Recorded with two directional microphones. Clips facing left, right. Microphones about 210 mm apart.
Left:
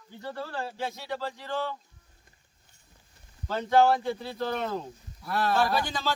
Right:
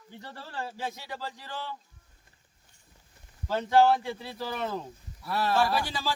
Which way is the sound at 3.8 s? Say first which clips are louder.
Left 1 dB; 5° right (ahead or behind).